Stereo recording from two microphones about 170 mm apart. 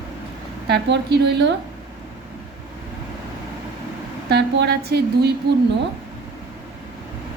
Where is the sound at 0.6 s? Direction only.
80° right.